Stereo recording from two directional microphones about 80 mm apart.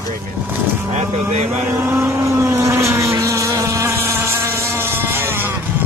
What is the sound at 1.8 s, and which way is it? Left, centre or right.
Motorboat, right.